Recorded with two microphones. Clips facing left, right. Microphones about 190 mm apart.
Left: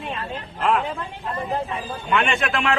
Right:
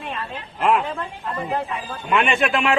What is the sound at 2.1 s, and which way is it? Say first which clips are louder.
Speech: right 3 dB; centre (ahead or behind).